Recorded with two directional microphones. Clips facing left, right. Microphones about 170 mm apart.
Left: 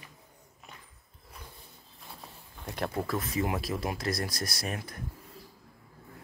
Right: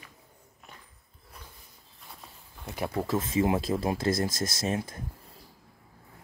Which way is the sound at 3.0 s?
25° right (ahead or behind).